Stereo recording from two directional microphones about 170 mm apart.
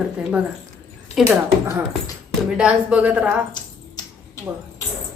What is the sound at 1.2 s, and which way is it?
A woman's voice, 15° right (ahead or behind).